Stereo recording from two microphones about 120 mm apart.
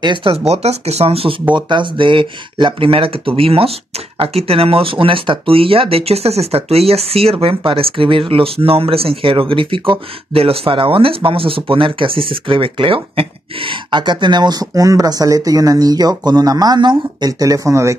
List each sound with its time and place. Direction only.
0.0 s speech: 45° right (ahead or behind)
0.5 s speech: 60° right (ahead or behind)
1.5 s speech: 40° right (ahead or behind); by 17.9 s 25° right (ahead or behind)